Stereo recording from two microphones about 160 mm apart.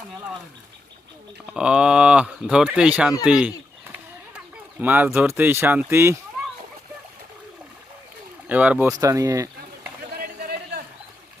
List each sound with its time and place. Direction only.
1.5 s speech: 5° right (ahead or behind)
8.4 s speech: 10° right (ahead or behind)
8.9 s speech: 20° right (ahead or behind)
10.2 s a sound: 75° right (ahead or behind)